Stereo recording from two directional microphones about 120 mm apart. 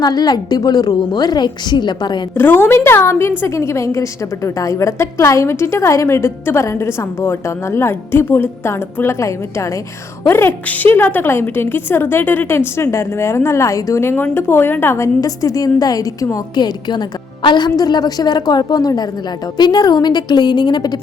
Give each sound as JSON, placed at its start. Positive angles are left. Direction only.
{"t": 0.0, "sound": "a woman's voice", "side_deg": 35}
{"t": 2.3, "sound": "a woman's voice", "side_deg": 20}